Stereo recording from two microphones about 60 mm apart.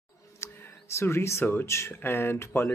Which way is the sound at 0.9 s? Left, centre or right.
Left.